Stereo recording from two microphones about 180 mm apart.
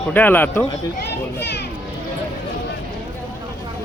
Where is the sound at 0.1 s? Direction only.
10° left (ahead or behind).